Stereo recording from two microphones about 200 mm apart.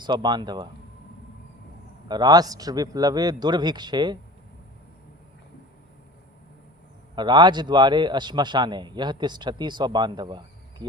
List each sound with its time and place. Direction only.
0.0 s a man's voice: 20° right (ahead or behind)
2.0 s a man's voice: 20° right (ahead or behind)
7.2 s a man's voice: 20° right (ahead or behind)